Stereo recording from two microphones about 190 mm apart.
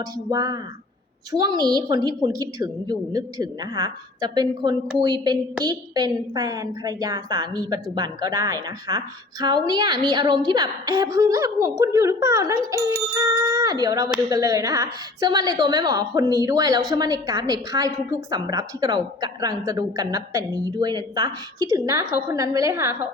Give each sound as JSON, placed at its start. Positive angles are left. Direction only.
{"t": 0.0, "sound": "a woman's voice", "side_deg": -20}